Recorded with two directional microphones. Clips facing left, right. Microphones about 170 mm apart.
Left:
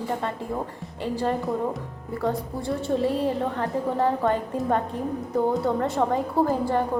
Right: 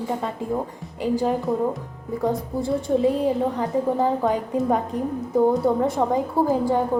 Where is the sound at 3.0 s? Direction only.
10° right (ahead or behind).